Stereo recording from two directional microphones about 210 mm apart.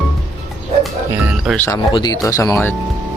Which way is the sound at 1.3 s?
Centre (ahead or behind).